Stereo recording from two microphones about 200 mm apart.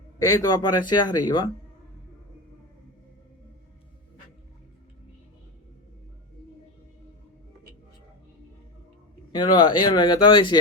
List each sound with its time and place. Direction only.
0.2 s speech: 20° left (ahead or behind)
9.3 s speech: 20° left (ahead or behind)